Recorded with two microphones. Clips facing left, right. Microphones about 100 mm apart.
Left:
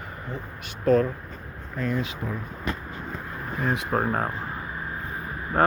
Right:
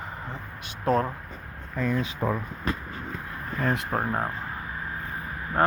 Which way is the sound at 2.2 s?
90° right.